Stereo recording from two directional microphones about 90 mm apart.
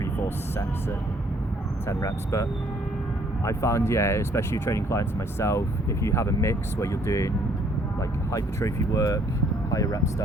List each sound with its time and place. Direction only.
1.9 s speech: 35° left (ahead or behind)
8.3 s speech: 40° left (ahead or behind)